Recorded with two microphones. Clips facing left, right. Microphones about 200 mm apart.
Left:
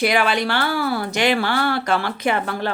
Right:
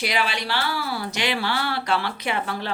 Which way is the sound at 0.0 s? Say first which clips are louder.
Left 7 dB; 50° left (ahead or behind).